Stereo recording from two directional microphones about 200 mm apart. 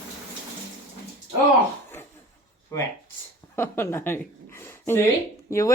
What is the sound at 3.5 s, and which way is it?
A woman's voice, 10° left (ahead or behind).